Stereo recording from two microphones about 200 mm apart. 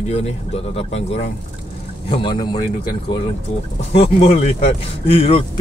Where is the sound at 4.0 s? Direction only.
30° left (ahead or behind).